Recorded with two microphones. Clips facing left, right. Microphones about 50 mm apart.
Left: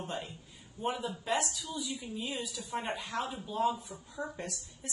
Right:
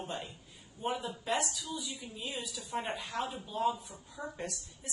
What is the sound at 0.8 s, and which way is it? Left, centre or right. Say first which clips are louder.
Speech: left 1 dB; centre.